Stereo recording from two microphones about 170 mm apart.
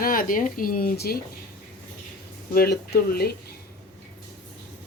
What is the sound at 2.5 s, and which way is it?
Speech, 65° left (ahead or behind).